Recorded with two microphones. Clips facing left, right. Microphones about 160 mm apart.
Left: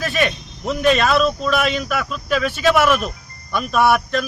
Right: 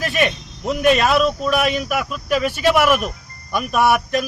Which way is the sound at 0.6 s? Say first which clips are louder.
Right 1 dB; 10° right (ahead or behind).